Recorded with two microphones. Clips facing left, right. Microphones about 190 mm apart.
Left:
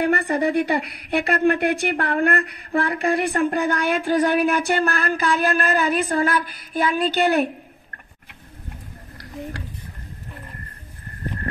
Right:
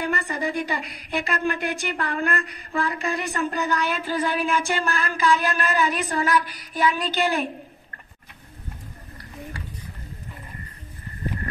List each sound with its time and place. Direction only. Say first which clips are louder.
0.0 s speech: left 7 dB; 60° left (ahead or behind)